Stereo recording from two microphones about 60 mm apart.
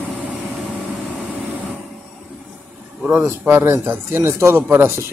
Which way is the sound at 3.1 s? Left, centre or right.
Right.